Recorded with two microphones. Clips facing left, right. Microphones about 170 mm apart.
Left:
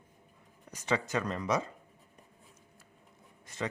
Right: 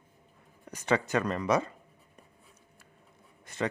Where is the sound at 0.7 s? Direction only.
60° right (ahead or behind).